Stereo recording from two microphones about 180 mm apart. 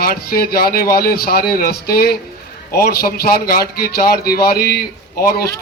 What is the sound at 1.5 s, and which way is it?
A man's voice, 55° left (ahead or behind).